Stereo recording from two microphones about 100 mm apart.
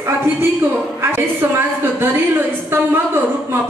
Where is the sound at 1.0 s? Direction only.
20° right (ahead or behind).